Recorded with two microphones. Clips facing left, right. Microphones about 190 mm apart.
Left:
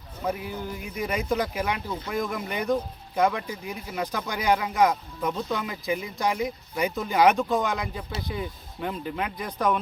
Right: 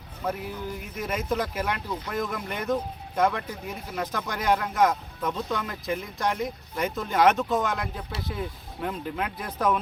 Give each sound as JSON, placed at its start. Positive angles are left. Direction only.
{"t": 0.3, "sound": "speech", "side_deg": 0}